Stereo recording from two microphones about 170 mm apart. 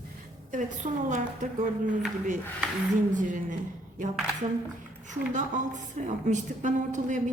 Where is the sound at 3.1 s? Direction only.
50° right (ahead or behind).